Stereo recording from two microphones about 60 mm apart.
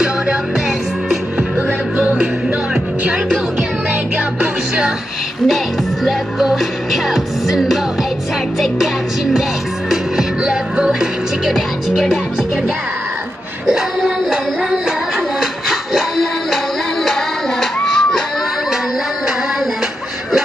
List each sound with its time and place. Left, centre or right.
0.0 s music: centre
2.0 s music: right
4.4 s music: centre
6.0 s music: centre
13.7 s music: centre
17.8 s a sound: centre